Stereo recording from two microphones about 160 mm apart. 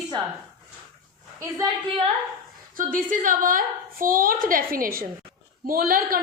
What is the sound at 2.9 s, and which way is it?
A woman's voice, 55° right (ahead or behind).